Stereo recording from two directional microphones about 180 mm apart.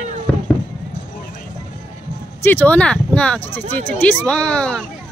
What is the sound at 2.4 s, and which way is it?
Speech, 10° left (ahead or behind).